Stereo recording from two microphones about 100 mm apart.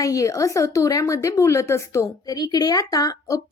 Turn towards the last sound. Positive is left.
turn(degrees=35)  # may be behind; listen again after turning